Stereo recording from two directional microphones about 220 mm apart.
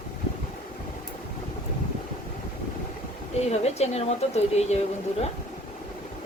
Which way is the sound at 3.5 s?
30° left (ahead or behind).